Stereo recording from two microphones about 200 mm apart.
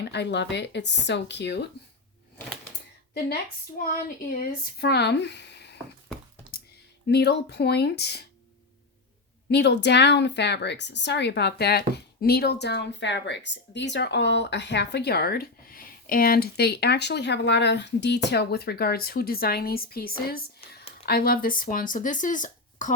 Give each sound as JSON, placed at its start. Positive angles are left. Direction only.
{"t": 0.0, "sound": "a woman's voice", "side_deg": 60}
{"t": 4.3, "sound": "a woman's voice", "side_deg": 50}
{"t": 7.1, "sound": "a woman's voice", "side_deg": 55}
{"t": 9.5, "sound": "a woman's voice", "side_deg": 55}